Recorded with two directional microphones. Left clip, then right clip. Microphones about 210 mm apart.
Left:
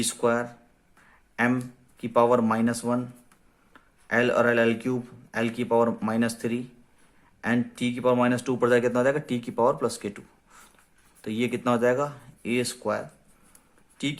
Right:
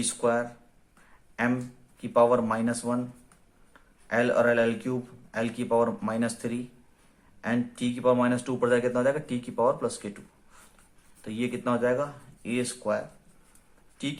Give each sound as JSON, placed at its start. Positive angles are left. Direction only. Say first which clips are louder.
{"t": 0.0, "sound": "speech", "louder": "left 1 dB", "side_deg": 35}
{"t": 14.0, "sound": "speech", "louder": "left 3 dB", "side_deg": 35}